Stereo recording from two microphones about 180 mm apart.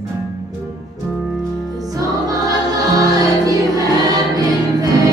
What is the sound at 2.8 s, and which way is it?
Choir, 20° right (ahead or behind).